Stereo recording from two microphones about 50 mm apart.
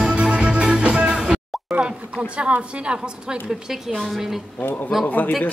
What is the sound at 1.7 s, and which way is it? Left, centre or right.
Speech, right.